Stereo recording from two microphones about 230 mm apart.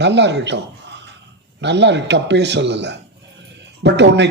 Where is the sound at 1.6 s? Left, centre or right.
Right.